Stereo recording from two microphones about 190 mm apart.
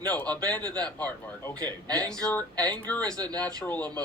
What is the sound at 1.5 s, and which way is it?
Speech, 20° right (ahead or behind).